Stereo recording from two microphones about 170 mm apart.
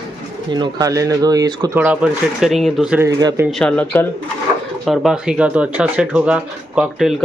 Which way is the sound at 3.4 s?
5° left (ahead or behind).